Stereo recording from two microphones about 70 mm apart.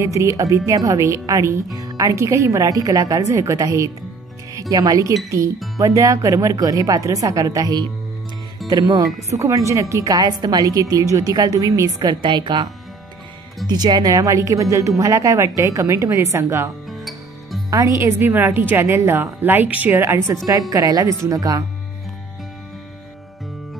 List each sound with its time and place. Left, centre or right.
0.0 s a woman's voice: right
8.6 s a woman's voice: right
11.3 s speech: right
12.0 s a woman's voice: right
13.7 s a woman's voice: right
16.9 s music: centre
17.6 s speech: right
17.9 s a woman's voice: right
20.1 s speech: right